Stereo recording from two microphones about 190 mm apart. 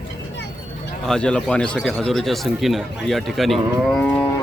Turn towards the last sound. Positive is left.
turn(degrees=5)  # may be behind; listen again after turning